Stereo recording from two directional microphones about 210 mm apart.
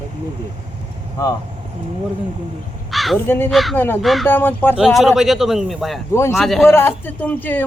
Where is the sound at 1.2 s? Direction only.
15° left (ahead or behind).